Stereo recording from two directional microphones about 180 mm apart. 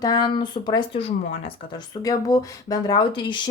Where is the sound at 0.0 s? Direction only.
20° left (ahead or behind).